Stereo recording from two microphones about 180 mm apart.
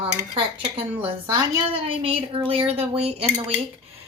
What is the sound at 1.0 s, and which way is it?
Speech, 15° right (ahead or behind).